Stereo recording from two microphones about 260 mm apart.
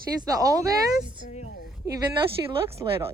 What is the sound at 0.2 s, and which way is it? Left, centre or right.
Speech, centre.